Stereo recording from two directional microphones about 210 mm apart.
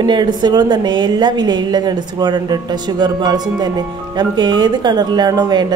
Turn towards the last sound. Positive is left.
turn(degrees=-20)  # may be behind; listen again after turning